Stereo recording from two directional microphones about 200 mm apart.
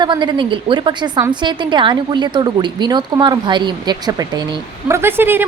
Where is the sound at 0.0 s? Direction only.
20° right (ahead or behind).